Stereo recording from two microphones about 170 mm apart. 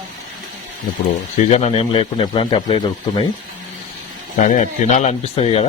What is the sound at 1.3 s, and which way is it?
Speech, 40° left (ahead or behind).